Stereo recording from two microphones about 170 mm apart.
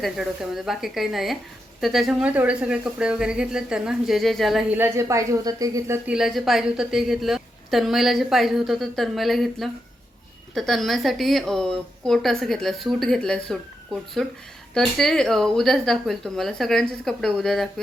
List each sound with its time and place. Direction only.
0.0 s speech: centre (ahead or behind)
4.8 s speech: 15° right (ahead or behind)
6.1 s speech: 5° right (ahead or behind)